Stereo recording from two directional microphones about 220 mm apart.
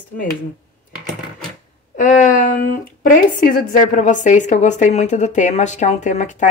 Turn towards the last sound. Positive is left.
turn(degrees=35)  # may be behind; listen again after turning